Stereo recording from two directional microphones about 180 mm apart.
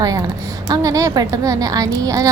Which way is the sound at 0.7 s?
20° right (ahead or behind).